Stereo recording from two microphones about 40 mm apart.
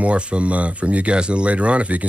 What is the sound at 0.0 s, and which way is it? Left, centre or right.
Speech, right.